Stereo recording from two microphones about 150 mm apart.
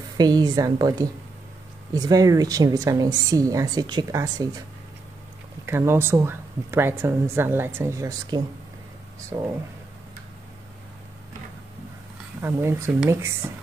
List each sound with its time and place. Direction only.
0.2 s a woman's voice: 25° right (ahead or behind)
5.7 s a woman's voice: 15° right (ahead or behind)
12.4 s a woman's voice: 15° right (ahead or behind)